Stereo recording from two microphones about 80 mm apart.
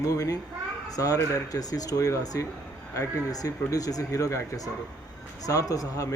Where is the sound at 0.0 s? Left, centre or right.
Left.